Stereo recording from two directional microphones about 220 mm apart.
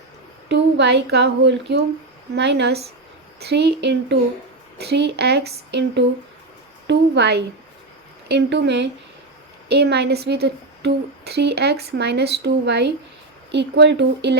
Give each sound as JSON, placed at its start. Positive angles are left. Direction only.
{"t": 0.4, "sound": "a woman's voice", "side_deg": -50}